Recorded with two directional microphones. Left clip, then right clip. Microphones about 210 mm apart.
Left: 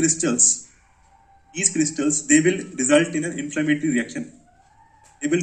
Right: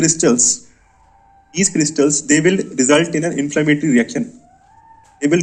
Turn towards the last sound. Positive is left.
turn(degrees=-50)  # may be behind; listen again after turning